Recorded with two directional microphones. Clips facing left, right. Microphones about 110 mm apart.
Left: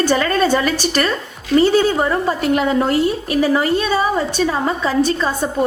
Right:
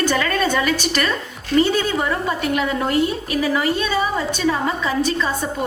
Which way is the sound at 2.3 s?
40° left (ahead or behind).